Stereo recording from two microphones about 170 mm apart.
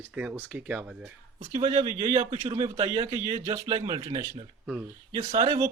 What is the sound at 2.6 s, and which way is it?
Speech, 20° right (ahead or behind).